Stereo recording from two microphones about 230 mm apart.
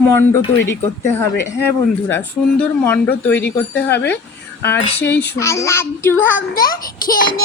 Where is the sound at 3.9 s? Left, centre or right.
Left.